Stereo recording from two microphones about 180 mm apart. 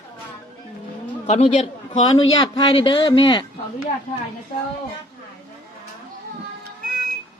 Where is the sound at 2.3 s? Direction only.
25° left (ahead or behind).